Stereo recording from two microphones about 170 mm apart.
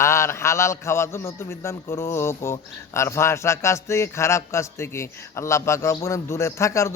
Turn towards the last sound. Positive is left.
turn(degrees=15)  # may be behind; listen again after turning